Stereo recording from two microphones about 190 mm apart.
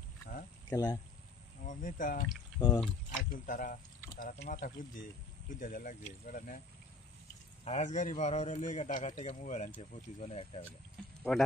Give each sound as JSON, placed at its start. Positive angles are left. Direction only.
{"t": 0.7, "sound": "speech", "side_deg": 20}
{"t": 1.7, "sound": "speech", "side_deg": 45}
{"t": 2.2, "sound": "speech", "side_deg": 20}
{"t": 3.3, "sound": "speech", "side_deg": 45}
{"t": 7.6, "sound": "a man's voice", "side_deg": 35}
{"t": 11.3, "sound": "speech", "side_deg": 0}